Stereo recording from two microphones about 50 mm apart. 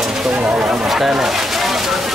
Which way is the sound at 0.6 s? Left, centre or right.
Centre.